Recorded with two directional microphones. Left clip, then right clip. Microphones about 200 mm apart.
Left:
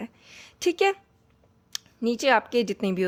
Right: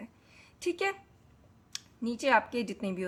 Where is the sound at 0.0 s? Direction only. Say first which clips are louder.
Left 10 dB; 40° left (ahead or behind).